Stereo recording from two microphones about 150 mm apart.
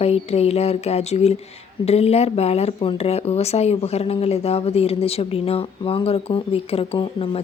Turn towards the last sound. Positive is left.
turn(degrees=35)  # may be behind; listen again after turning